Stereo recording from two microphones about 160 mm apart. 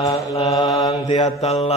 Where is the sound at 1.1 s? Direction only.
45° left (ahead or behind).